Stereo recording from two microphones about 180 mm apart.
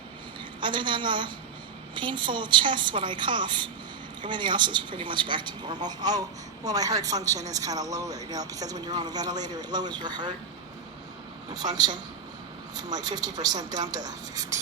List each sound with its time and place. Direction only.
0.6 s speech: 25° right (ahead or behind)
12.7 s speech: 20° right (ahead or behind)